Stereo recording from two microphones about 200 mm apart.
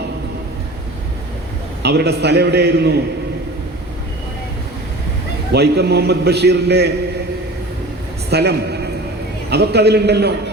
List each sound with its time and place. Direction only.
1.8 s a man's voice: 55° right (ahead or behind)
5.5 s a man's voice: 55° right (ahead or behind)
8.3 s a man's voice: 55° right (ahead or behind)